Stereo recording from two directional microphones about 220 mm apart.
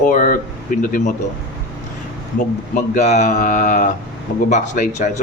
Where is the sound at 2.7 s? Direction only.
30° left (ahead or behind).